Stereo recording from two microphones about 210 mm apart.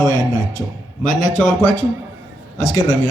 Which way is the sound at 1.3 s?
5° left (ahead or behind).